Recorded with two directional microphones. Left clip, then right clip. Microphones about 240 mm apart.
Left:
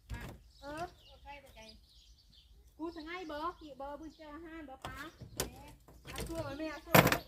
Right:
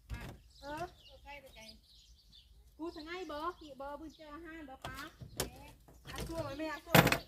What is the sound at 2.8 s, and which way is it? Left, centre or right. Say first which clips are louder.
Speech: left 1 dB; centre.